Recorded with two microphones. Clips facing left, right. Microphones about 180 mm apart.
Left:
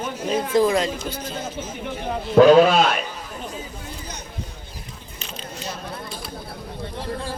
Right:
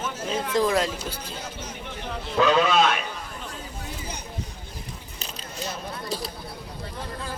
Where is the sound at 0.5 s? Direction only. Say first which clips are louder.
Left 4 dB; centre (ahead or behind).